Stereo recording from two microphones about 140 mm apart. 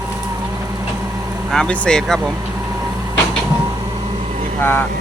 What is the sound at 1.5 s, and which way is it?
Speech, 5° left (ahead or behind).